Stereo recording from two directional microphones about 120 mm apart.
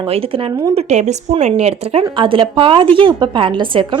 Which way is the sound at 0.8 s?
65° right (ahead or behind).